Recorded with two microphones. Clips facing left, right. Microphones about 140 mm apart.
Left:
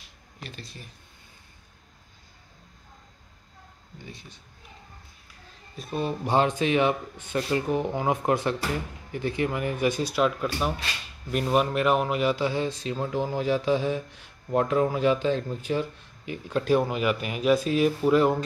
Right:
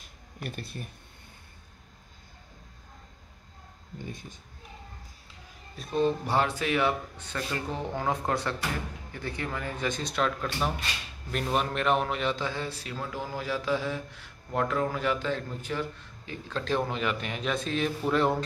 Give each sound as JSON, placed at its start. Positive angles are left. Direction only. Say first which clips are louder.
{"t": 0.0, "sound": "a sound", "louder": "right 4 dB", "side_deg": -55}
{"t": 4.1, "sound": "speech", "louder": "right 3 dB", "side_deg": -50}
{"t": 5.8, "sound": "speech", "louder": "right 3 dB", "side_deg": 5}